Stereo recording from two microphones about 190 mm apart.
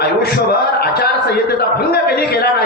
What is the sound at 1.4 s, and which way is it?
A man's voice, 55° left (ahead or behind).